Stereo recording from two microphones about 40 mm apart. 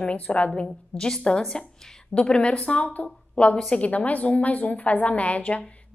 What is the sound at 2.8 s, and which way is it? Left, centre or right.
Speech, left.